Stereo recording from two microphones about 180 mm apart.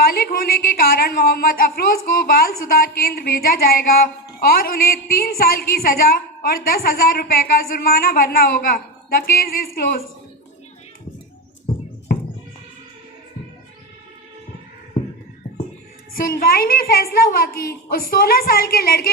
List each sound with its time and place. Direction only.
0.0 s speech: 55° left (ahead or behind)
16.1 s a woman's voice: 50° left (ahead or behind)